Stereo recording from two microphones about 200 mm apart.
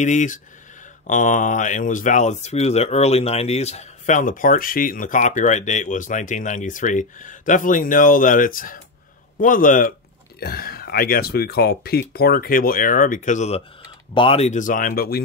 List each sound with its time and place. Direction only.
0.0 s speech: 40° left (ahead or behind)